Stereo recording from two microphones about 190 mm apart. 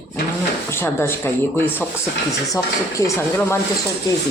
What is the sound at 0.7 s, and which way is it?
Speech, 15° left (ahead or behind).